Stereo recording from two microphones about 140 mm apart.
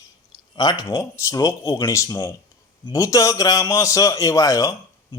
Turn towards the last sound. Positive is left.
turn(degrees=25)  # may be behind; listen again after turning